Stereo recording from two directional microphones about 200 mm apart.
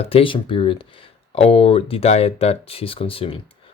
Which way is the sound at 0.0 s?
30° left (ahead or behind).